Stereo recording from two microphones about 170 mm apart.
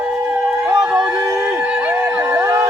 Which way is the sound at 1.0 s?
20° right (ahead or behind).